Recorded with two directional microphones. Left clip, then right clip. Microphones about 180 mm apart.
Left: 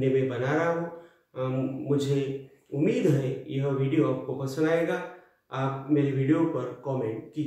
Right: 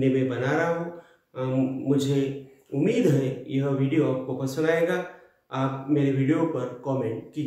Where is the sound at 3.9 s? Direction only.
25° right (ahead or behind).